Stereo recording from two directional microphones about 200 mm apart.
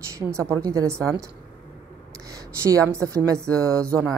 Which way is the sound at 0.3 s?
15° right (ahead or behind).